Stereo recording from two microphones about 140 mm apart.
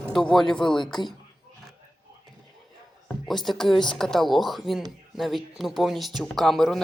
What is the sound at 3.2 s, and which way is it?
Speech, centre (ahead or behind).